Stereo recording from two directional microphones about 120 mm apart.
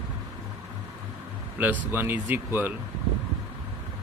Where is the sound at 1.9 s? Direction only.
15° right (ahead or behind).